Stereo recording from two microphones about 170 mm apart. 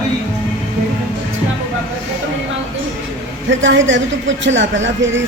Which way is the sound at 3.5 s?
90° right.